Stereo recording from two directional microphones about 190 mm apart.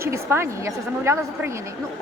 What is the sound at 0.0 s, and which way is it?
A woman's voice, 15° right (ahead or behind).